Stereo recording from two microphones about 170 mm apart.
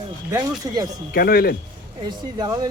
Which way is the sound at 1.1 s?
65° left (ahead or behind).